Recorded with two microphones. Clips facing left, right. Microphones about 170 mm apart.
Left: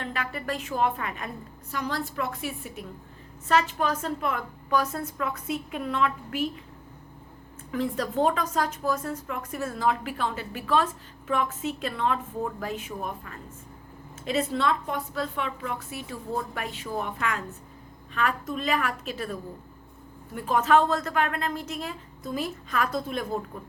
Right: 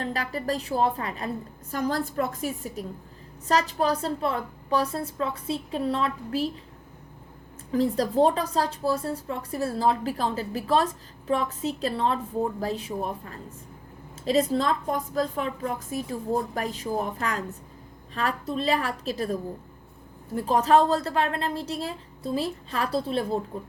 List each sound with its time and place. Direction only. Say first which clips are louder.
0.0 s a woman's voice: right 3 dB; 35° right (ahead or behind)
1.7 s a woman's voice: right 4 dB; 45° right (ahead or behind)
7.7 s a woman's voice: right 5 dB; 35° right (ahead or behind)